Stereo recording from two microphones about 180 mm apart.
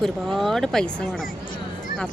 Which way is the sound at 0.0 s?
Centre (ahead or behind).